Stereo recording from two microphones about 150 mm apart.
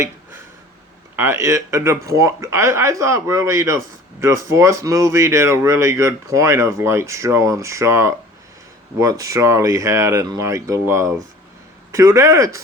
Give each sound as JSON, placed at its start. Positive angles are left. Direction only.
{"t": 1.1, "sound": "speech", "side_deg": -15}